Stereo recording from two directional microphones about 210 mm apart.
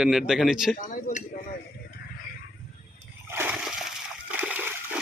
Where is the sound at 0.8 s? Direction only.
40° left (ahead or behind).